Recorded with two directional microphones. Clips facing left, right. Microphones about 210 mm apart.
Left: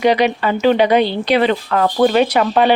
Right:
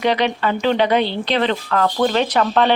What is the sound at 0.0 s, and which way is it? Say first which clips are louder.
Speech: left 4 dB; 10° left (ahead or behind).